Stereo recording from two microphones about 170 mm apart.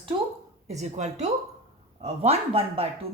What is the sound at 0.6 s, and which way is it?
Speech, 40° right (ahead or behind).